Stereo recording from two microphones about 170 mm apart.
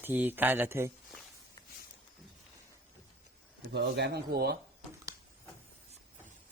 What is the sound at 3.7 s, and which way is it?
Speech, 80° right.